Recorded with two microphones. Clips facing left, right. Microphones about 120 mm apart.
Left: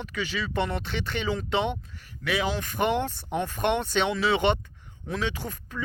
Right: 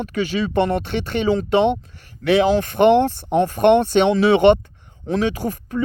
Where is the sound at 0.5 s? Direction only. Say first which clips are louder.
Right 9 dB; 55° right (ahead or behind).